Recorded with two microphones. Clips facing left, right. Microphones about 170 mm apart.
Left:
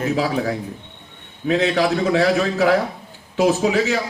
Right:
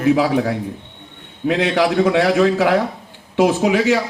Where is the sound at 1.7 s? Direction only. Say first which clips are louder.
Right 3 dB; 75° right (ahead or behind).